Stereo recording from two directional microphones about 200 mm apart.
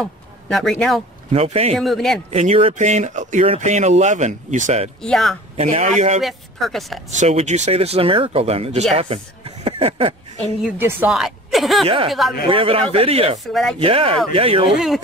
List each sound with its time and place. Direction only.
0.0 s speech: centre (ahead or behind)
1.3 s speech: 30° right (ahead or behind)
1.8 s a woman's voice: centre (ahead or behind)
2.3 s speech: 30° right (ahead or behind)
5.0 s a woman's voice: centre (ahead or behind)
5.6 s speech: 30° right (ahead or behind)
6.2 s a woman's voice: centre (ahead or behind)
7.1 s speech: 35° right (ahead or behind)
10.6 s a woman's voice: 10° right (ahead or behind)
12.4 s speech: 25° right (ahead or behind)
13.4 s a woman's voice: centre (ahead or behind)
13.7 s speech: 30° right (ahead or behind)
14.7 s a woman's voice: centre (ahead or behind)